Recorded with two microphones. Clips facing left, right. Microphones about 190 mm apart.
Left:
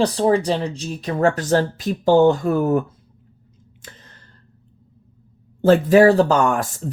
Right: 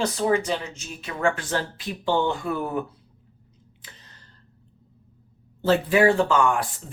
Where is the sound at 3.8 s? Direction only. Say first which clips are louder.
Left 7 dB; 45° left (ahead or behind).